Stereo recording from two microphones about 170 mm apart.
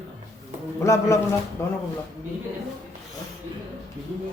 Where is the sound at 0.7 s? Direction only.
15° left (ahead or behind).